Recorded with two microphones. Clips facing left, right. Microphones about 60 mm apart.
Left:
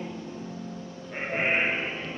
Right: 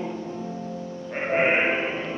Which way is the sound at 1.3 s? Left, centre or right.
Centre.